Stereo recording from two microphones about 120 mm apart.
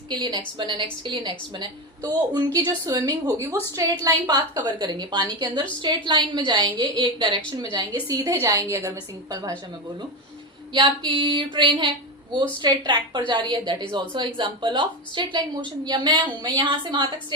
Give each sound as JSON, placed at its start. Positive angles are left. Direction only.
{"t": 0.1, "sound": "a woman's voice", "side_deg": -40}
{"t": 10.8, "sound": "a woman's voice", "side_deg": -40}